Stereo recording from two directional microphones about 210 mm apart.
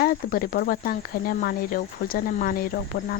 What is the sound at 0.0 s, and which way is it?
Speech, 45° left (ahead or behind).